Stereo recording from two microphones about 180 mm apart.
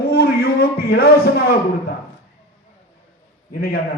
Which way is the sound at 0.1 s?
60° left (ahead or behind).